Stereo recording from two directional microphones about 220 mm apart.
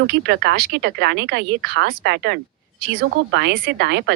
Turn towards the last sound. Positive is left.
turn(degrees=-50)  # may be behind; listen again after turning